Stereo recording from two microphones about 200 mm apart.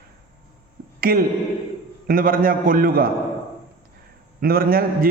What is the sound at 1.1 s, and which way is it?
A man's voice, 45° right (ahead or behind).